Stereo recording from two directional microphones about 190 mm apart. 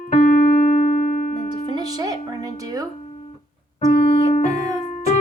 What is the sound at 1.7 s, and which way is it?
Music, 20° right (ahead or behind).